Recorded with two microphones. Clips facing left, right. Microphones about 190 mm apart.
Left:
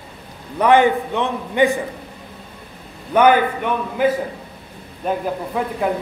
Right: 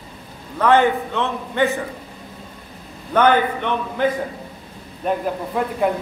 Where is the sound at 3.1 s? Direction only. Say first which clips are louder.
Left 2 dB; 10° left (ahead or behind).